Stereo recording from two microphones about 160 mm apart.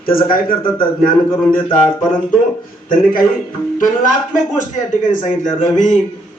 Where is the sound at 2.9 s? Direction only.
60° left (ahead or behind).